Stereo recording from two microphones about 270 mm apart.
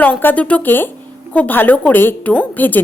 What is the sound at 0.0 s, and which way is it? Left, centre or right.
A woman's voice, centre.